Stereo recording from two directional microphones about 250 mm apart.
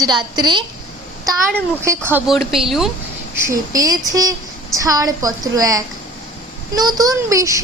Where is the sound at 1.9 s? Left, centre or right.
Centre.